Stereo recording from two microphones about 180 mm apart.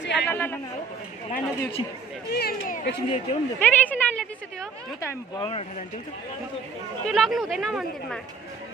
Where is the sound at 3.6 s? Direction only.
10° left (ahead or behind).